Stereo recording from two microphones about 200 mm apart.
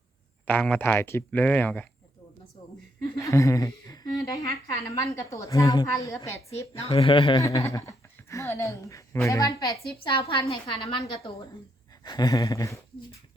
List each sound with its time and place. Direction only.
0.4 s a man's voice: 5° left (ahead or behind)
3.2 s a man's voice: 15° left (ahead or behind)
6.7 s a man's voice: 30° left (ahead or behind)
10.0 s a woman's voice: 30° left (ahead or behind)